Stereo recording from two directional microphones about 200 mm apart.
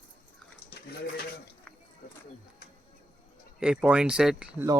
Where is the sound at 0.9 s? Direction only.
50° left (ahead or behind).